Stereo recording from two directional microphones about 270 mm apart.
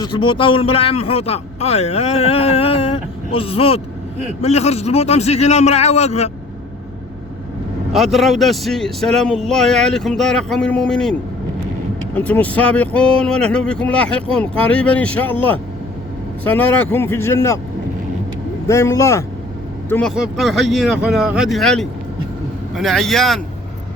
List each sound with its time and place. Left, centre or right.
0.0 s a man's voice: centre
7.9 s speech: centre
18.7 s speech: centre